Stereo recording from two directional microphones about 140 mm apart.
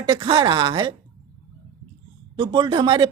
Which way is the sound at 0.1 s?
35° right (ahead or behind).